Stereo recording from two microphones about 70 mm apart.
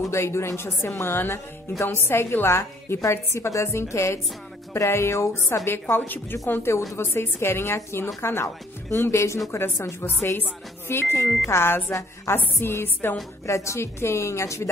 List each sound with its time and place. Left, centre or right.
0.1 s a woman's voice: left
3.0 s a woman's voice: left
5.7 s a woman's voice: left
13.5 s a woman's voice: left